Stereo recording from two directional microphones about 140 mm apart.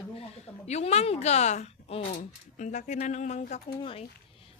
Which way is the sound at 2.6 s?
60° left (ahead or behind).